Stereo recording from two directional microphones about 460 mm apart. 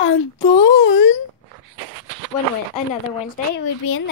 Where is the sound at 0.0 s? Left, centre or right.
Left.